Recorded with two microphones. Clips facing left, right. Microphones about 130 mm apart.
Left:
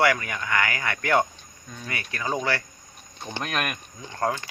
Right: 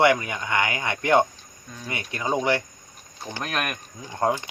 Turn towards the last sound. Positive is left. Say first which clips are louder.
# right 3 dB
turn(degrees=-20)  # may be behind; listen again after turning